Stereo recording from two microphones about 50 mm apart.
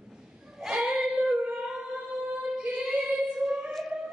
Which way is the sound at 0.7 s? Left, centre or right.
Centre.